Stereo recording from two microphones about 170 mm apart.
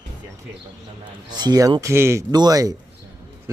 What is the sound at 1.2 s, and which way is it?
A man's voice, 25° right (ahead or behind).